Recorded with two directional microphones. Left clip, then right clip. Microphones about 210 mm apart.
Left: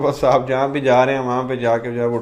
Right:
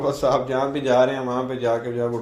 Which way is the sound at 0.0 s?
30° left (ahead or behind).